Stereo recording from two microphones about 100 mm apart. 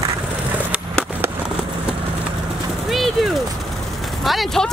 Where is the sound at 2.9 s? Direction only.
Centre (ahead or behind).